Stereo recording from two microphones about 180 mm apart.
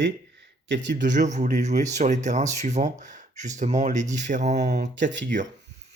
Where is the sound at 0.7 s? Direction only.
85° right.